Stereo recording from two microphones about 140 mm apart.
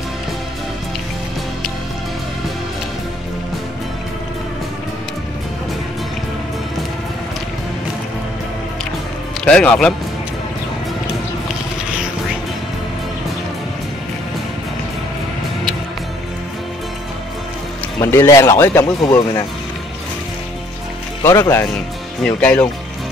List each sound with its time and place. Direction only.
9.4 s a man's voice: 5° left (ahead or behind)
18.0 s speech: 15° left (ahead or behind)
21.2 s speech: 20° left (ahead or behind)
22.2 s speech: 10° left (ahead or behind)